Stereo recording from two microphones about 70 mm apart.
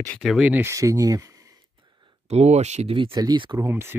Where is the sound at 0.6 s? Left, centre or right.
Right.